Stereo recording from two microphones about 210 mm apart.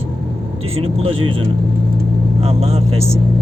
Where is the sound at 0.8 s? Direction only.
25° right (ahead or behind).